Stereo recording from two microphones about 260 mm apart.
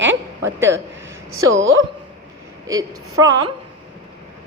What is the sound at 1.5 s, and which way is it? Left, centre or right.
Speech, right.